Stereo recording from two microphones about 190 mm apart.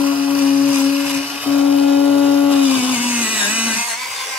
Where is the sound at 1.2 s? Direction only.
5° right (ahead or behind).